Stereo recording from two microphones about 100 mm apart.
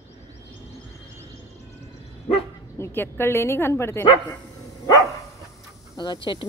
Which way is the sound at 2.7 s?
25° left (ahead or behind).